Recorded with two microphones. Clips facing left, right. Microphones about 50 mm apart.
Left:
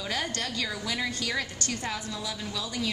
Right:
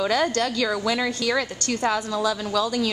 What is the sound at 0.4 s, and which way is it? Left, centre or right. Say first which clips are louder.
A woman's voice: right 9 dB; right.